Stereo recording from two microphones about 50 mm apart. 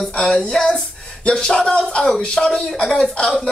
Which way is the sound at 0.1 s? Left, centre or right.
Centre.